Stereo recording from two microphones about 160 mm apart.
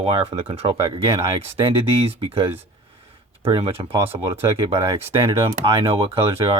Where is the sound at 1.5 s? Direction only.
35° right (ahead or behind).